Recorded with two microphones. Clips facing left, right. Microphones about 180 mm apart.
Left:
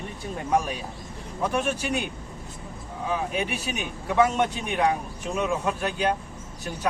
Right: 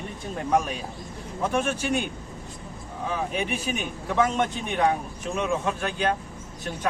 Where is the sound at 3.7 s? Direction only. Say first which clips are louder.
Left 3 dB; 5° left (ahead or behind).